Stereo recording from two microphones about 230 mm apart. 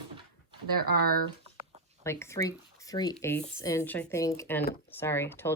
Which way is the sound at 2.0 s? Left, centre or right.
Centre.